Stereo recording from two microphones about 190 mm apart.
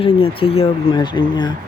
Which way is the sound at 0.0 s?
30° left (ahead or behind).